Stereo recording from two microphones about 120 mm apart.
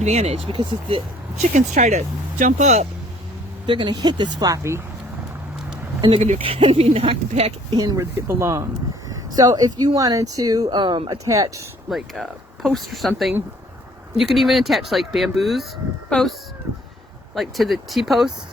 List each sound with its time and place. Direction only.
0.0 s speech: 70° right (ahead or behind); by 1.0 s 50° right (ahead or behind)
1.4 s speech: 85° right
3.7 s speech: 40° right (ahead or behind)
6.1 s speech: 85° right
6.4 s speech: 50° right (ahead or behind)
7.8 s speech: 25° right (ahead or behind); by 11.2 s 40° right (ahead or behind)
11.9 s speech: centre (ahead or behind)
17.3 s speech: centre (ahead or behind)